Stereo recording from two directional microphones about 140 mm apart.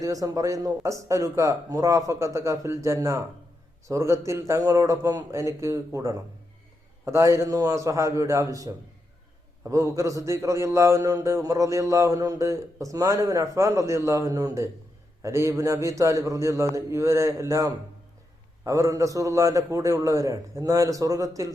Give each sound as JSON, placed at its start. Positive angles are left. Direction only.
{"t": 0.0, "sound": "a man's voice", "side_deg": -25}